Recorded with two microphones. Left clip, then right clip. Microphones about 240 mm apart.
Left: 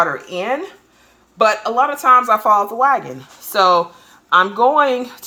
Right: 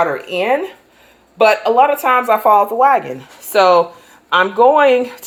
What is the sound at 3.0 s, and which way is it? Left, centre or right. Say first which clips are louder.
Speech: right 4 dB; left.